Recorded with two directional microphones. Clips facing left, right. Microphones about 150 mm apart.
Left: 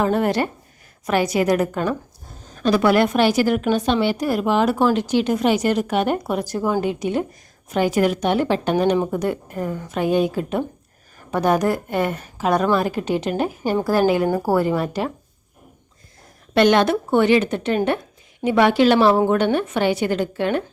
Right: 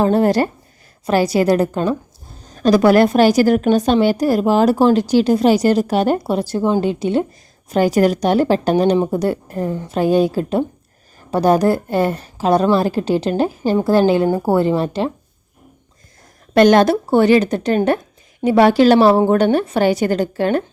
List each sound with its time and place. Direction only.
0.0 s a woman's voice: 35° right (ahead or behind)
2.6 s a woman's voice: 40° right (ahead or behind)
16.6 s a woman's voice: 40° right (ahead or behind)